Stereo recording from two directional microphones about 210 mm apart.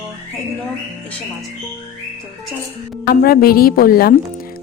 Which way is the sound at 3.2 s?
45° left (ahead or behind).